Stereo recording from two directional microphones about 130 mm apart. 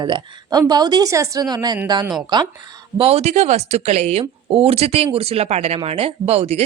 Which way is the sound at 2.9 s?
50° right (ahead or behind).